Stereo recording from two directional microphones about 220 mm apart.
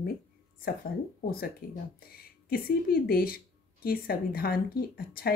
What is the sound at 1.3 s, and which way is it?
A woman's voice, 45° left (ahead or behind).